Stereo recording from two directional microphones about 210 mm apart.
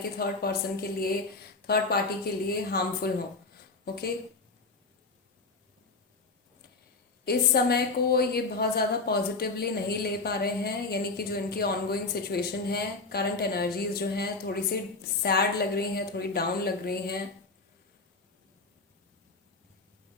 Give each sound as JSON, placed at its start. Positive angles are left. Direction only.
{"t": 0.2, "sound": "a woman's voice", "side_deg": 50}
{"t": 7.3, "sound": "a woman's voice", "side_deg": 50}